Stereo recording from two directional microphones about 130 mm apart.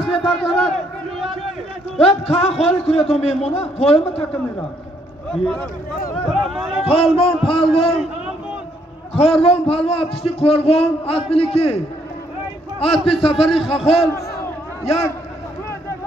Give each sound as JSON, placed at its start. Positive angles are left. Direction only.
{"t": 0.0, "sound": "a man's voice", "side_deg": 0}
{"t": 2.0, "sound": "a man's voice", "side_deg": 50}
{"t": 5.3, "sound": "speech", "side_deg": 5}
{"t": 7.2, "sound": "a man's voice", "side_deg": 45}
{"t": 9.1, "sound": "a man's voice", "side_deg": 50}
{"t": 12.7, "sound": "a man's voice", "side_deg": 50}